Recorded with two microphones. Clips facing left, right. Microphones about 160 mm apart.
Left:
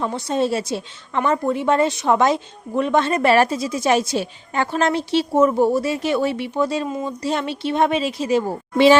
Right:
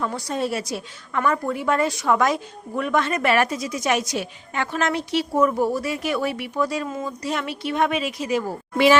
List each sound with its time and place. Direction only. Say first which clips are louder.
0.0 s a woman's voice: left 4 dB; 25° left (ahead or behind)